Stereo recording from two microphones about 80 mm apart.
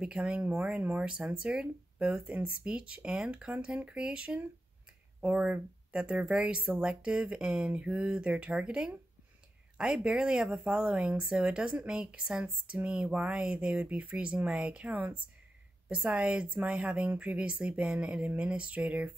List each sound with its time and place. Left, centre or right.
0.0 s speech: centre